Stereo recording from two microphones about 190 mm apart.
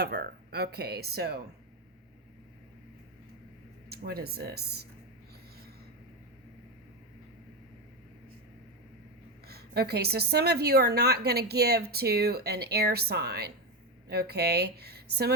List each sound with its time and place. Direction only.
0.0 s a woman's voice: 60° right (ahead or behind)
3.8 s a woman's voice: 55° right (ahead or behind)
9.5 s a woman's voice: 55° right (ahead or behind)